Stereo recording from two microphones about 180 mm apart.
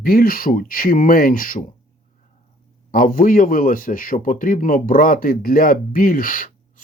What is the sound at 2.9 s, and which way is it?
Speech, 50° left (ahead or behind).